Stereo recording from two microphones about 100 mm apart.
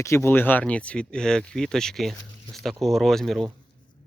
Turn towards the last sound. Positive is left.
turn(degrees=5)  # may be behind; listen again after turning